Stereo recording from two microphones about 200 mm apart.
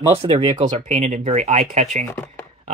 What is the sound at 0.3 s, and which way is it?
Speech, 30° right (ahead or behind).